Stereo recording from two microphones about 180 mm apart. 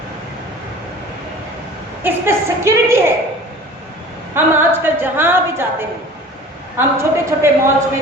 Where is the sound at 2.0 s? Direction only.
15° right (ahead or behind).